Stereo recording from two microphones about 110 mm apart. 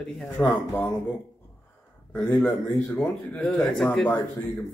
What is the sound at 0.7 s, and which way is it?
Speech, 20° left (ahead or behind).